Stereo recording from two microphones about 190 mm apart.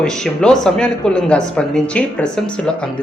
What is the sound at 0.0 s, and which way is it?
Speech, 5° left (ahead or behind).